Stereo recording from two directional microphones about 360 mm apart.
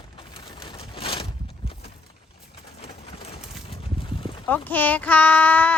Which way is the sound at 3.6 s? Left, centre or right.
Centre.